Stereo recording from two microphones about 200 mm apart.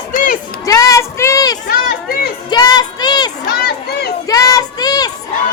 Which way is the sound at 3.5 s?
55° left (ahead or behind).